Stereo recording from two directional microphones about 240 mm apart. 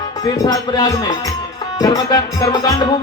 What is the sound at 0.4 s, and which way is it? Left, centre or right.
Speech, centre.